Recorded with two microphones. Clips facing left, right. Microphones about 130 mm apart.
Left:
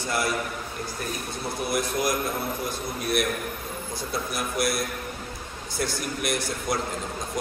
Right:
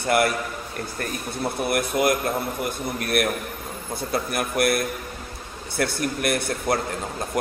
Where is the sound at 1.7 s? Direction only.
60° right (ahead or behind).